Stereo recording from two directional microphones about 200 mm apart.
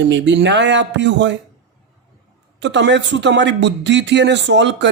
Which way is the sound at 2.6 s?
60° right (ahead or behind).